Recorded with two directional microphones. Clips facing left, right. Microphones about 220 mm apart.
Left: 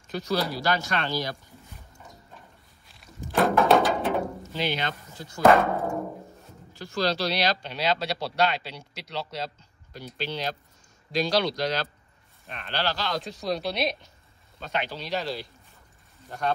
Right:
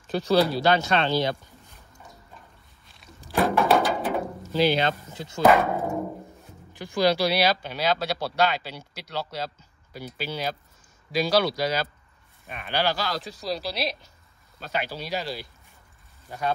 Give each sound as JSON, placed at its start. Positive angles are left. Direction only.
{"t": 0.0, "sound": "speech", "side_deg": -30}
{"t": 2.9, "sound": "a sound", "side_deg": 0}
{"t": 4.7, "sound": "speech", "side_deg": -25}
{"t": 5.6, "sound": "timpani", "side_deg": -15}
{"t": 6.7, "sound": "speech", "side_deg": -15}